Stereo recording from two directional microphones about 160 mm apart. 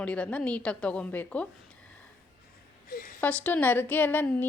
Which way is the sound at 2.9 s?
60° left (ahead or behind).